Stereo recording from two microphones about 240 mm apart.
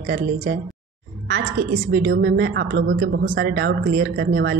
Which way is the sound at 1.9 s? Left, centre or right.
Right.